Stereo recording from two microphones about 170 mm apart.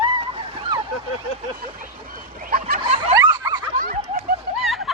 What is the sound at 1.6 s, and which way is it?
Fowl, 55° right (ahead or behind).